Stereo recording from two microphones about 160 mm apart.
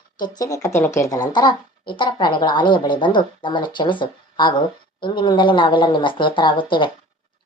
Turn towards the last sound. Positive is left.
turn(degrees=30)  # may be behind; listen again after turning